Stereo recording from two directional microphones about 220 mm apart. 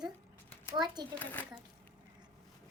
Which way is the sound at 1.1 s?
10° left (ahead or behind).